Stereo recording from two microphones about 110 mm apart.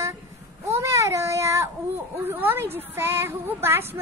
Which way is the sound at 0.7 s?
25° right (ahead or behind).